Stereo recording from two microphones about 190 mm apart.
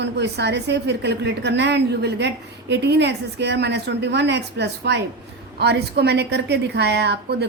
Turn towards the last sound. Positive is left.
turn(degrees=-60)  # may be behind; listen again after turning